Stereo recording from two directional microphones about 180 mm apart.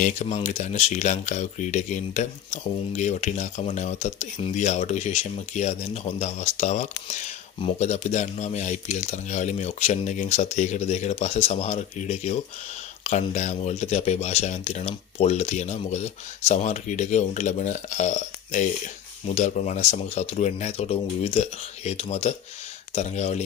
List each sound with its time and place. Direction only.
0.0 s speech: 40° left (ahead or behind)